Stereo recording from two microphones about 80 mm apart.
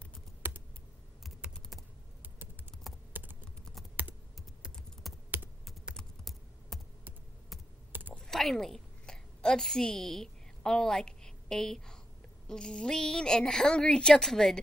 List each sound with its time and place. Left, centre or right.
0.4 s computer keyboard: right
1.5 s typing: centre
3.1 s typing: right
4.0 s computer keyboard: right
5.1 s computer keyboard: centre
5.9 s typing: centre
8.2 s a sound: centre
12.4 s a woman's voice: centre